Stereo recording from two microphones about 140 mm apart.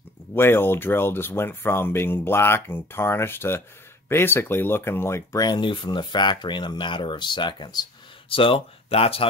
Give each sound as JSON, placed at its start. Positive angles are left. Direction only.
{"t": 0.3, "sound": "speech", "side_deg": 15}